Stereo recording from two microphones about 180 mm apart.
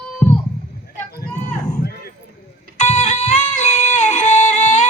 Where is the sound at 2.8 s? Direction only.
40° left (ahead or behind).